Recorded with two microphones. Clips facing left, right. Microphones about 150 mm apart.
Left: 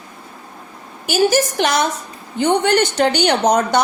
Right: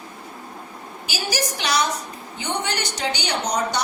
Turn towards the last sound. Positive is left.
turn(degrees=55)  # may be behind; listen again after turning